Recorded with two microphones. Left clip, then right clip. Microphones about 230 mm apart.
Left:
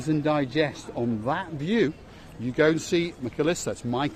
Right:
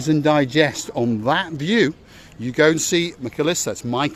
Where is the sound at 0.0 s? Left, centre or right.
Right.